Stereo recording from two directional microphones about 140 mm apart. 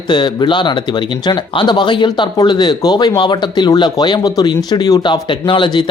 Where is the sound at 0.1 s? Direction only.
35° left (ahead or behind).